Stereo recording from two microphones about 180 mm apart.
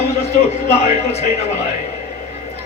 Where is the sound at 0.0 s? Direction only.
35° left (ahead or behind).